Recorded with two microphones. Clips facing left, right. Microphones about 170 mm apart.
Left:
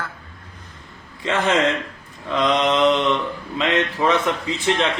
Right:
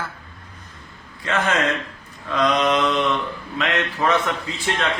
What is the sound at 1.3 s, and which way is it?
A man's voice, 25° left (ahead or behind).